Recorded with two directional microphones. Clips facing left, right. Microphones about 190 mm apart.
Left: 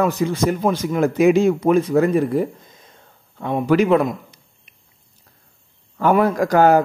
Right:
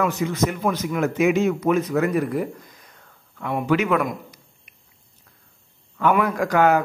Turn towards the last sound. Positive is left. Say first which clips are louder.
# left 4 dB
turn(degrees=35)  # may be behind; listen again after turning